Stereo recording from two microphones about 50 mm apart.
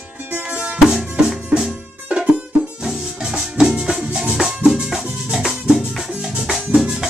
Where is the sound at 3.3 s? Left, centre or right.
Centre.